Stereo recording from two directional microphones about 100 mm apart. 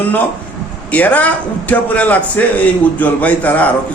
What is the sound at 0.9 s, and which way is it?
A man's voice, 15° left (ahead or behind).